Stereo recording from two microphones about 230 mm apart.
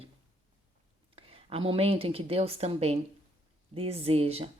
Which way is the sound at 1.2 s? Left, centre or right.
Right.